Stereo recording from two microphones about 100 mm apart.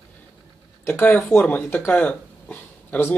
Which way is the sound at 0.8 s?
20° left (ahead or behind).